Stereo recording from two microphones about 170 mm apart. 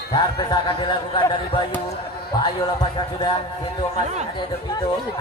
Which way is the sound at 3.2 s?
30° left (ahead or behind).